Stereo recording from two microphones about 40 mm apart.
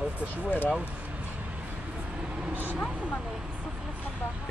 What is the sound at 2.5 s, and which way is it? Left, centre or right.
Speech, right.